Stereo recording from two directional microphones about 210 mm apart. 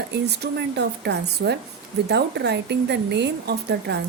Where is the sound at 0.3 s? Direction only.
50° right (ahead or behind).